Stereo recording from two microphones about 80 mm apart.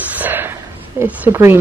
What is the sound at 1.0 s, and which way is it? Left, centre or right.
Speech, right.